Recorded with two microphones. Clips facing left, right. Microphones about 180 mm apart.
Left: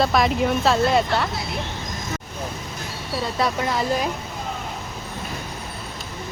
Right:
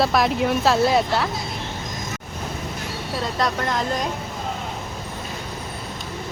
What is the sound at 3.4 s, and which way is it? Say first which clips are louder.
Speech: left 1 dB; 5° left (ahead or behind).